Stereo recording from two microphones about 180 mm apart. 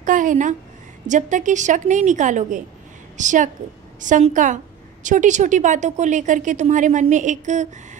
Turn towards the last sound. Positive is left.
turn(degrees=-40)  # may be behind; listen again after turning